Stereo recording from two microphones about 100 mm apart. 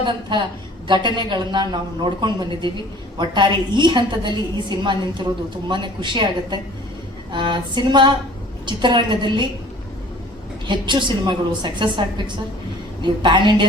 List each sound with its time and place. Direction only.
0.0 s a woman's voice: 50° right (ahead or behind)
10.7 s a woman's voice: 50° right (ahead or behind)